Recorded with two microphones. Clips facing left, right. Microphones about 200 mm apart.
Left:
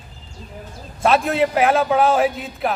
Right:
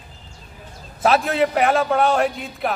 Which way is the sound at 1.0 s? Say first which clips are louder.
Left 1 dB; centre (ahead or behind).